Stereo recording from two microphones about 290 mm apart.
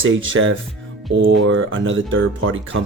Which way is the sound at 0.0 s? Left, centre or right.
Right.